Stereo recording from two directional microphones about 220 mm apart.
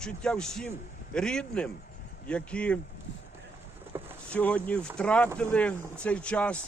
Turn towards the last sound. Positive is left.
turn(degrees=5)  # may be behind; listen again after turning